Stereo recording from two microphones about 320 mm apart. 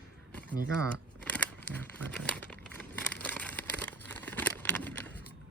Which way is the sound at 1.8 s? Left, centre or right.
Centre.